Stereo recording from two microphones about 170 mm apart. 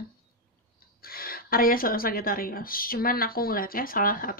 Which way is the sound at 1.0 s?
60° left (ahead or behind).